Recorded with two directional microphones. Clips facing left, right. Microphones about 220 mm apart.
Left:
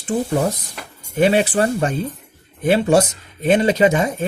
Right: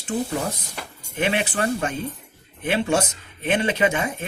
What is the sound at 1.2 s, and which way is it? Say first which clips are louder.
Speech: left 8 dB; 35° left (ahead or behind).